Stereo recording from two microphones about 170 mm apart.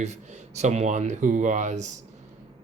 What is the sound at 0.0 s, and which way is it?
Speech, 40° right (ahead or behind).